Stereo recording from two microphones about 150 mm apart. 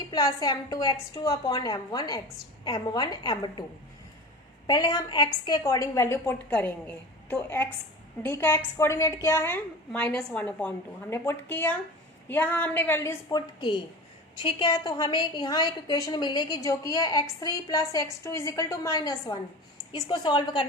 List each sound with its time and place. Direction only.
0.1 s a woman's voice: 25° left (ahead or behind)
4.6 s a woman's voice: 25° left (ahead or behind)
13.3 s a woman's voice: 30° left (ahead or behind)